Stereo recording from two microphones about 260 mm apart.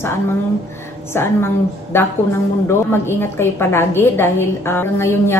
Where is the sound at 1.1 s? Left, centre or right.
Centre.